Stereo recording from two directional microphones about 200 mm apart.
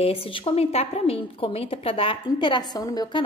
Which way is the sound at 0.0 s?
30° left (ahead or behind).